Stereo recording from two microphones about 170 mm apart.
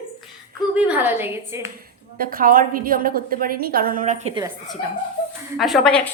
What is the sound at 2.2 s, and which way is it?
A woman's voice, 55° right (ahead or behind).